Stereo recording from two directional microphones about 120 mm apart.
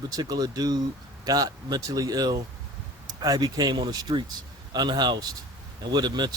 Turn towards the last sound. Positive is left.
turn(degrees=-35)  # may be behind; listen again after turning